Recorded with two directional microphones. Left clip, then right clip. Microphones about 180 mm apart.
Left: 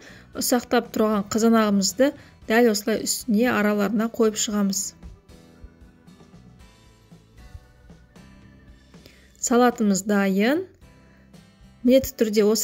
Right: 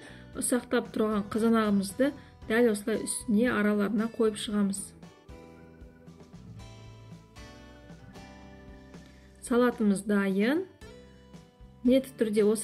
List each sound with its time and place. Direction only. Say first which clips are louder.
0.1 s speech: left 7 dB; 45° left (ahead or behind)
9.4 s speech: left 7 dB; 45° left (ahead or behind)
11.8 s speech: left 7 dB; 45° left (ahead or behind)